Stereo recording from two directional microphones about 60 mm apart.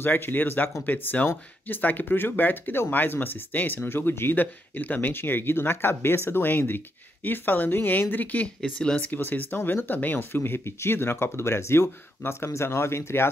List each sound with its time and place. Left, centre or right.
0.0 s speech: left
8.6 s speech: centre
9.1 s speech: left